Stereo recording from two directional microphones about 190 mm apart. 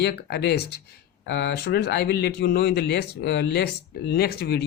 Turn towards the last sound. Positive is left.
turn(degrees=55)  # may be behind; listen again after turning